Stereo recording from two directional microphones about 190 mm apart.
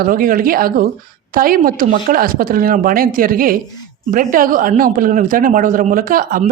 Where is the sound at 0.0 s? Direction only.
50° right (ahead or behind).